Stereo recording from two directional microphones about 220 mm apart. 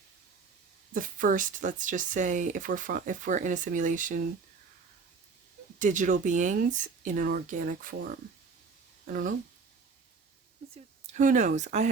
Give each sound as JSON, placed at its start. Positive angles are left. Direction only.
{"t": 0.9, "sound": "speech", "side_deg": -40}
{"t": 5.8, "sound": "speech", "side_deg": -35}
{"t": 10.8, "sound": "speech", "side_deg": -30}